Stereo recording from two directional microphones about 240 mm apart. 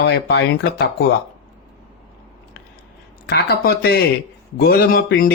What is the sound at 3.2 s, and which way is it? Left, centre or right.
Speech, left.